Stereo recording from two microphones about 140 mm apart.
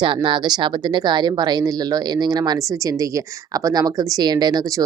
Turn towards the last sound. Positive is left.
turn(degrees=-30)  # may be behind; listen again after turning